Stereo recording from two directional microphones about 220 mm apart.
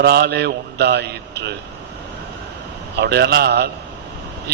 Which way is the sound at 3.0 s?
45° right (ahead or behind).